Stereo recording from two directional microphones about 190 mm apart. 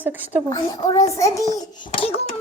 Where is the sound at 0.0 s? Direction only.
10° right (ahead or behind).